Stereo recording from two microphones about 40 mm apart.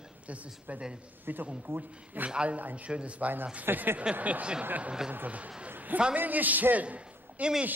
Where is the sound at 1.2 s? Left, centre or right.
Right.